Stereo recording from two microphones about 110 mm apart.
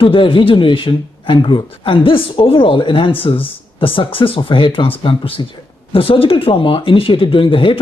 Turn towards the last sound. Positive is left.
turn(degrees=50)  # may be behind; listen again after turning